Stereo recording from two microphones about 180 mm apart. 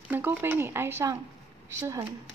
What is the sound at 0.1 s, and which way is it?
A woman's voice, 10° right (ahead or behind).